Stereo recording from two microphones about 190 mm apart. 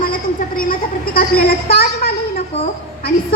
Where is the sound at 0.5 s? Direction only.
50° left (ahead or behind).